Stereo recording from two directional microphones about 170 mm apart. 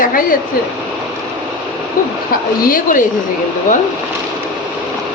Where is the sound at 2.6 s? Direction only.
55° left (ahead or behind).